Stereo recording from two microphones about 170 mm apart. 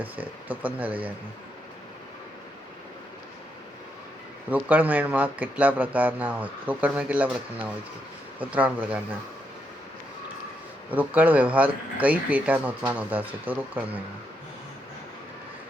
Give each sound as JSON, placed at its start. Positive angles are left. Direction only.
{"t": 0.0, "sound": "speech", "side_deg": -10}
{"t": 4.4, "sound": "speech", "side_deg": -10}
{"t": 10.9, "sound": "speech", "side_deg": -10}